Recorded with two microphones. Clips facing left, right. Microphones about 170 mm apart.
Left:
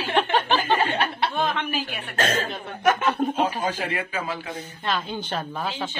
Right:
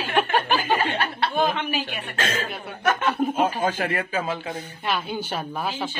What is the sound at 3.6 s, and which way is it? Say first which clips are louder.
Speech: right 3 dB; 50° right (ahead or behind).